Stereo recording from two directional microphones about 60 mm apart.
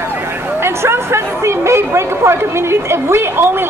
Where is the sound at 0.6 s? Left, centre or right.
Right.